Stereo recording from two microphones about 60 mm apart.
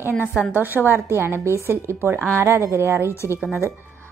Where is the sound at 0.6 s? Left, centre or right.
Right.